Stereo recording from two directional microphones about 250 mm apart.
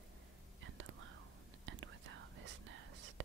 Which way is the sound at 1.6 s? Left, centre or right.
Right.